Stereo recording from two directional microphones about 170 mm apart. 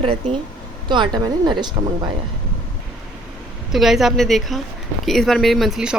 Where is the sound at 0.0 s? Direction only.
35° right (ahead or behind).